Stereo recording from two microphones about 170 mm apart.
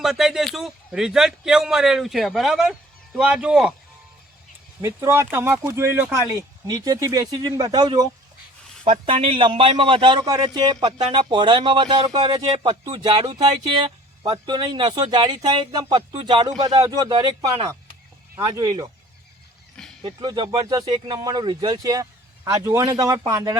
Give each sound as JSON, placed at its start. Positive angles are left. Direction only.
{"t": 0.0, "sound": "speech", "side_deg": 0}
{"t": 4.8, "sound": "speech", "side_deg": -15}
{"t": 8.8, "sound": "a man's voice", "side_deg": -35}
{"t": 20.0, "sound": "a man's voice", "side_deg": -25}